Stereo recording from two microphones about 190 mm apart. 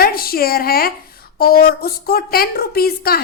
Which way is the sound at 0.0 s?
50° left (ahead or behind).